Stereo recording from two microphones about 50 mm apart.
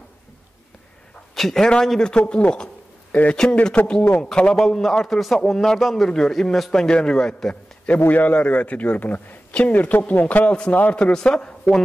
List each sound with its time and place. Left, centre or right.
1.3 s a man's voice: centre
2.1 s a man's voice: left; by 6.9 s centre
6.9 s a man's voice: centre
8.1 s a man's voice: left